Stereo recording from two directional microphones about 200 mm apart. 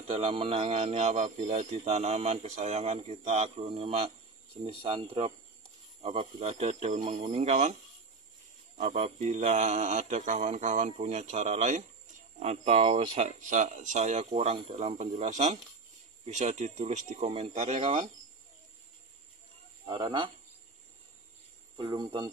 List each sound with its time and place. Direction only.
0.0 s speech: 30° right (ahead or behind)
8.7 s speech: 35° right (ahead or behind)
19.9 s speech: 25° right (ahead or behind)
21.7 s speech: 20° right (ahead or behind)